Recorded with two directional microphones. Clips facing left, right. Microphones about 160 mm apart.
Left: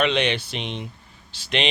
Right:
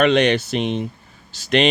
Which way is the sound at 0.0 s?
45° right (ahead or behind).